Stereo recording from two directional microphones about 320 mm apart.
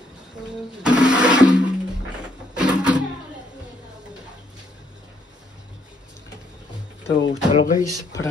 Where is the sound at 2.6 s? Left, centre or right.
Centre.